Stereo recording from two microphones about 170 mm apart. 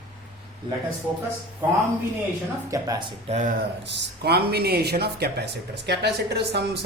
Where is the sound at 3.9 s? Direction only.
70° right (ahead or behind).